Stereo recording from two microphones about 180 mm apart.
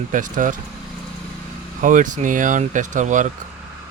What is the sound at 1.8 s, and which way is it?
Speech, 45° right (ahead or behind).